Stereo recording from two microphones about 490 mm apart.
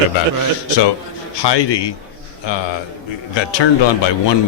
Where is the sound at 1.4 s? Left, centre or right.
Left.